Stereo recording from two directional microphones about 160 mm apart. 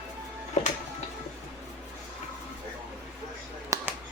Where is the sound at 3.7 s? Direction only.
20° right (ahead or behind).